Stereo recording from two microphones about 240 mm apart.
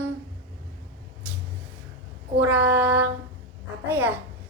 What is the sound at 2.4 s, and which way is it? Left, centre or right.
Child singing, centre.